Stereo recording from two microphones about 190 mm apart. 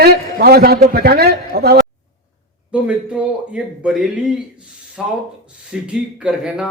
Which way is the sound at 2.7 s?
5° right (ahead or behind).